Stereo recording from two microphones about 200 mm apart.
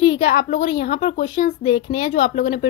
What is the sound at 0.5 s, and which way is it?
A woman's voice, 40° left (ahead or behind).